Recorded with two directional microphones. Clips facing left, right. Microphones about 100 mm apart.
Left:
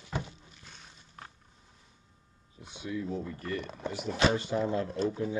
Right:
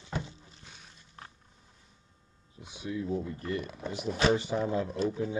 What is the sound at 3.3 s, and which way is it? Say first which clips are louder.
Speech: right 2 dB; 20° right (ahead or behind).